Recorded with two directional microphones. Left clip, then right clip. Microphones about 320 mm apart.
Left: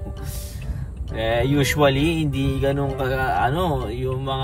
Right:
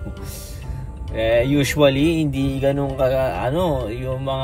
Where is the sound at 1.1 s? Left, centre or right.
Centre.